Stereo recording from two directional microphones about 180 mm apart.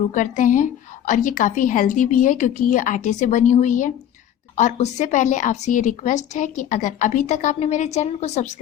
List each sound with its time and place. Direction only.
0.1 s a woman's voice: 45° left (ahead or behind)